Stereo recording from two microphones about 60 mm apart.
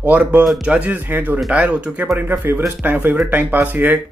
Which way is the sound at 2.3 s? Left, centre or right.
Right.